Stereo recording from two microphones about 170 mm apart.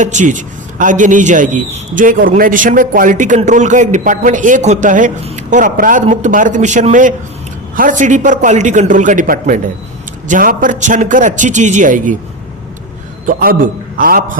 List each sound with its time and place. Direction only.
0.0 s a man's voice: 45° right (ahead or behind)
13.2 s a man's voice: 55° right (ahead or behind)